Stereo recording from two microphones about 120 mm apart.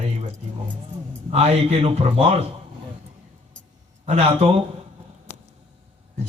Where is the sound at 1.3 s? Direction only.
65° right (ahead or behind).